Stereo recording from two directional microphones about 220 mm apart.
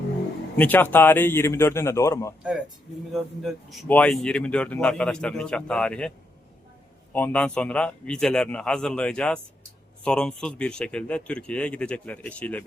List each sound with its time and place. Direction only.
0.6 s speech: 10° left (ahead or behind)
3.1 s speech: centre (ahead or behind)